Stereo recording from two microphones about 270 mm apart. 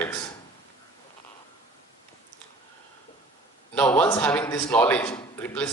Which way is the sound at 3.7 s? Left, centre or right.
Centre.